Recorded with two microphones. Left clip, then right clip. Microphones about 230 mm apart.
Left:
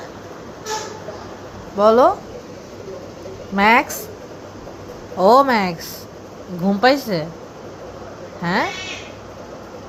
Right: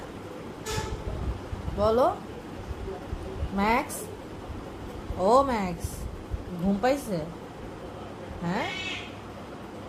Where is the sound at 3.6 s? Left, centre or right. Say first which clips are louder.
Left 12 dB; left.